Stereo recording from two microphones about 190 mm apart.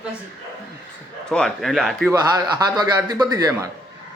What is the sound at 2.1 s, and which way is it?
A man's voice, 20° right (ahead or behind).